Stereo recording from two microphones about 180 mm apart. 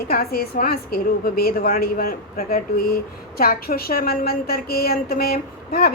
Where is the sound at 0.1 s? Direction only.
55° left (ahead or behind).